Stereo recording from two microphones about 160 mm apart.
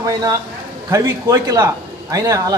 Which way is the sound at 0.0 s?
20° right (ahead or behind).